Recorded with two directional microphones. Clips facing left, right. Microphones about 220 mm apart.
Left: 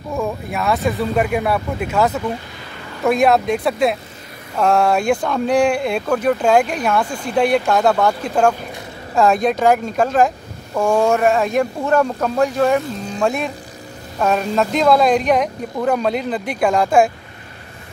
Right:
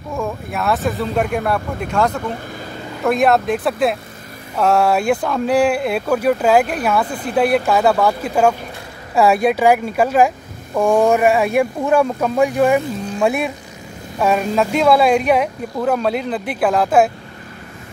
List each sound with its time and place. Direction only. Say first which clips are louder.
0.1 s speech: left 1 dB; centre (ahead or behind)